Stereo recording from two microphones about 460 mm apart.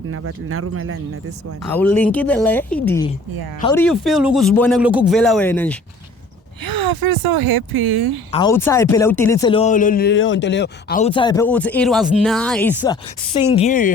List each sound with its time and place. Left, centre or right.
0.1 s speech: right
1.7 s speech: centre
6.7 s a woman's voice: right
8.3 s speech: centre